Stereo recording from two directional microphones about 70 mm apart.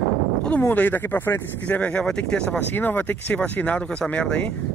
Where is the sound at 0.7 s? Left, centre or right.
Left.